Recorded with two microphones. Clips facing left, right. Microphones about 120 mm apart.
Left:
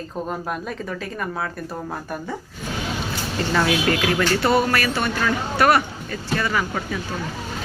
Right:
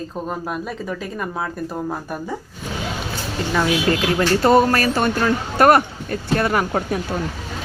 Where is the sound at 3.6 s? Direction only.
25° right (ahead or behind); by 7.0 s 50° right (ahead or behind).